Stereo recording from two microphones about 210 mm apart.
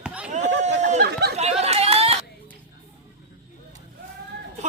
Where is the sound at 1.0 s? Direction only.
50° right (ahead or behind).